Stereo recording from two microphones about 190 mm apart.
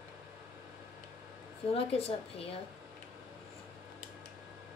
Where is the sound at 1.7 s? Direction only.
30° left (ahead or behind).